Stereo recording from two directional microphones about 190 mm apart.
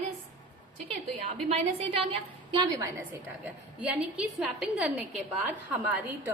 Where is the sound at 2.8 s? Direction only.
10° right (ahead or behind).